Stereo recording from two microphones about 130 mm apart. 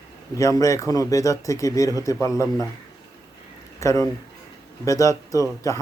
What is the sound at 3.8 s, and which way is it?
A man's voice, 25° left (ahead or behind).